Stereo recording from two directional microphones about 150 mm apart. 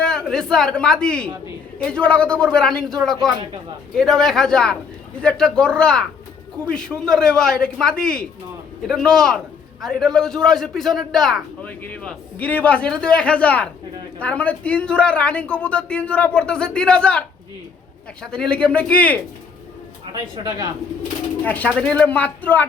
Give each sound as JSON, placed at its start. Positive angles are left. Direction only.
{"t": 0.0, "sound": "a man's voice", "side_deg": 5}
{"t": 20.1, "sound": "speech", "side_deg": -25}
{"t": 21.4, "sound": "speech", "side_deg": 10}